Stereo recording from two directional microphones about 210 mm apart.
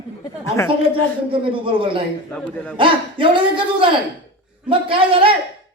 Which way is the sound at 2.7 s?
25° right (ahead or behind).